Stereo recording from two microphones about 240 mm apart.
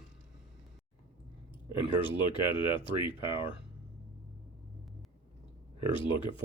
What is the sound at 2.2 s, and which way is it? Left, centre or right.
Speech, centre.